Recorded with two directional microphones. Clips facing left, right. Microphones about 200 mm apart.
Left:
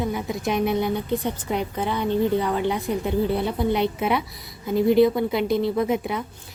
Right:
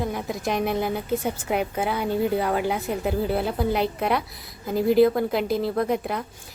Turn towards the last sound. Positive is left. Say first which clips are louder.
# left 1 dB
turn(degrees=0)  # may be behind; listen again after turning